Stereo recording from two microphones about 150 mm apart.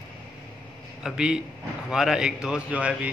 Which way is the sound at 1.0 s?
5° right (ahead or behind).